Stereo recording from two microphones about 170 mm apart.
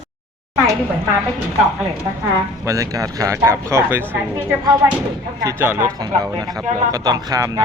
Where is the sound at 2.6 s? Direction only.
20° right (ahead or behind).